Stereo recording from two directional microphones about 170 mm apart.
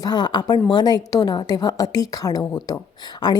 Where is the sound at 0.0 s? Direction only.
25° left (ahead or behind).